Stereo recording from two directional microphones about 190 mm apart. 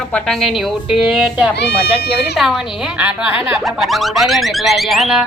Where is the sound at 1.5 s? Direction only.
60° left (ahead or behind).